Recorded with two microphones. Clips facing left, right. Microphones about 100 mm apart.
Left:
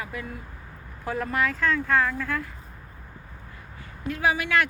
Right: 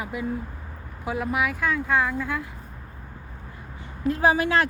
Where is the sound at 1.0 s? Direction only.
10° right (ahead or behind).